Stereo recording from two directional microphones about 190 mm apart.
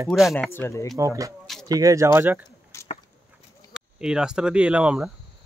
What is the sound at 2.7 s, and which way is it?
Chop, 15° left (ahead or behind).